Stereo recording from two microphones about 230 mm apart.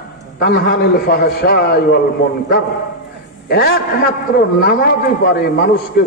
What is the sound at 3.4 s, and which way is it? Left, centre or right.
A man's voice, left.